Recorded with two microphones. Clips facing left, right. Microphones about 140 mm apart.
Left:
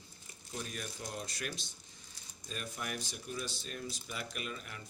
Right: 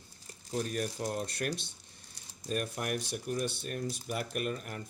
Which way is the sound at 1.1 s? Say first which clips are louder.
Right 7 dB; 55° right (ahead or behind).